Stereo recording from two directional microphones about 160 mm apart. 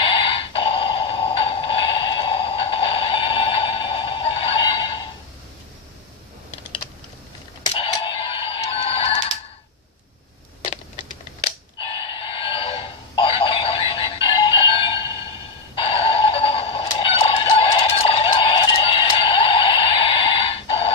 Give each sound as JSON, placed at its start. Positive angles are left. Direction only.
{"t": 0.0, "sound": "music", "side_deg": 35}
{"t": 7.9, "sound": "music", "side_deg": 30}
{"t": 10.6, "sound": "a sound", "side_deg": 30}
{"t": 15.7, "sound": "music", "side_deg": 35}